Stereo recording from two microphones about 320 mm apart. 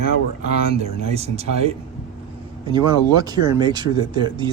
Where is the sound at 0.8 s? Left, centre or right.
Centre.